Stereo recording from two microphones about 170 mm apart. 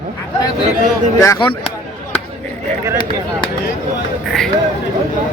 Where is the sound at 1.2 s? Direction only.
25° left (ahead or behind).